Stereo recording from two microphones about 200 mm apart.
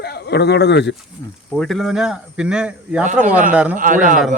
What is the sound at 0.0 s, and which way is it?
Speech, 55° left (ahead or behind).